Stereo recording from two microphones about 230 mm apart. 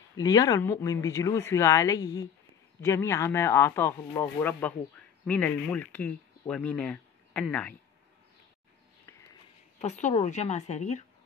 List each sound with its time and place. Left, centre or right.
0.2 s speech: centre
9.8 s speech: left